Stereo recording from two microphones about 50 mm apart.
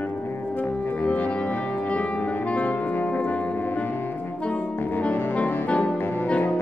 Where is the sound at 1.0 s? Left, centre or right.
Left.